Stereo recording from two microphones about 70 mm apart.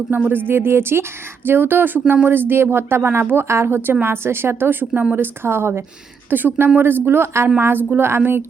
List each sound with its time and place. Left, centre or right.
0.2 s a woman's voice: right